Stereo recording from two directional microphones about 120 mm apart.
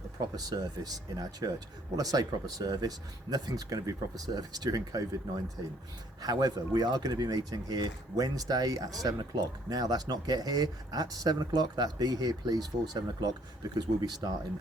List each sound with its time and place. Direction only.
0.3 s speech: 30° right (ahead or behind)
6.2 s speech: 30° right (ahead or behind)